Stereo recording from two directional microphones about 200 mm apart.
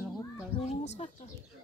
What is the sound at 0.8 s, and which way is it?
Speech, 35° left (ahead or behind).